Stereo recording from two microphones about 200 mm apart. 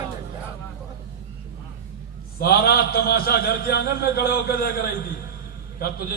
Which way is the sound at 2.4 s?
50° left (ahead or behind).